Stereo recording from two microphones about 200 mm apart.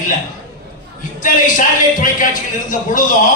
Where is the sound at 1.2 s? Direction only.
40° left (ahead or behind).